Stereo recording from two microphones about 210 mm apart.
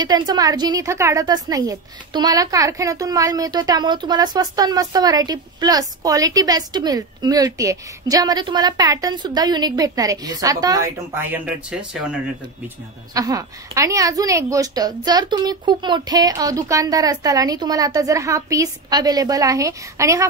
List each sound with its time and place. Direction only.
0.0 s a woman's voice: 20° right (ahead or behind); by 12.2 s 5° right (ahead or behind)
13.1 s a woman's voice: 15° right (ahead or behind)